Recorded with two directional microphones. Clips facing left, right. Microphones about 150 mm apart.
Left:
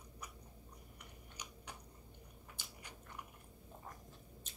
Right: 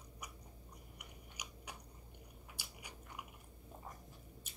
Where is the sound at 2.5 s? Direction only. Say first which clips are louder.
Right 1 dB; 10° right (ahead or behind).